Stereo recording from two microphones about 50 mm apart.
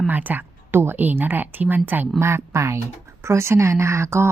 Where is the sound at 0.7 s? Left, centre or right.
Right.